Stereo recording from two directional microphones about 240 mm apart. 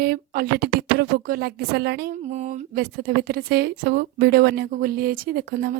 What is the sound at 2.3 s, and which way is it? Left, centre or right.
A woman's voice, right.